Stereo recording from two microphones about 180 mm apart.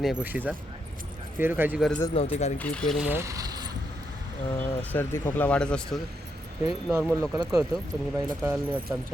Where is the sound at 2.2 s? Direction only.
30° left (ahead or behind).